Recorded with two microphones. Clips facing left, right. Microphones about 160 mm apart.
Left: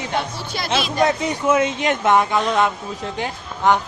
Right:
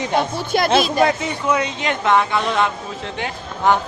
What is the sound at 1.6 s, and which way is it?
Speech, 50° left (ahead or behind).